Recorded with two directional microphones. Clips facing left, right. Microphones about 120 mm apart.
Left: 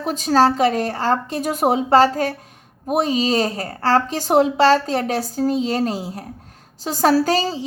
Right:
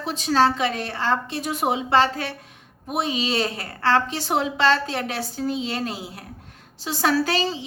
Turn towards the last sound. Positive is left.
turn(degrees=40)  # may be behind; listen again after turning